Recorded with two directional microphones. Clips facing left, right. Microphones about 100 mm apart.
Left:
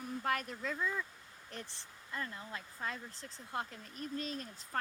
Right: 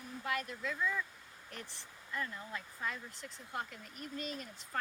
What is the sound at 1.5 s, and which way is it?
Speech, 30° left (ahead or behind).